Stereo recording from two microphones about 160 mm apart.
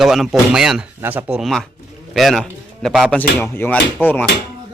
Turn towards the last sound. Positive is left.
turn(degrees=10)  # may be behind; listen again after turning